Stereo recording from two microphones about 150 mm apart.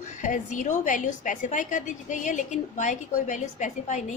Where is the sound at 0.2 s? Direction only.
55° left (ahead or behind).